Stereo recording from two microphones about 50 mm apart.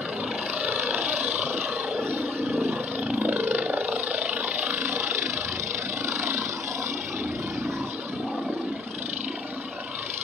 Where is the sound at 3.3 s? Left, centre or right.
Right.